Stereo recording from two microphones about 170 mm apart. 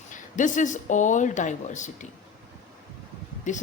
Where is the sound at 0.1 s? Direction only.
50° left (ahead or behind).